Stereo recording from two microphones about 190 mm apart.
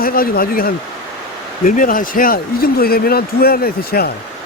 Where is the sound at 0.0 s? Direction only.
50° left (ahead or behind).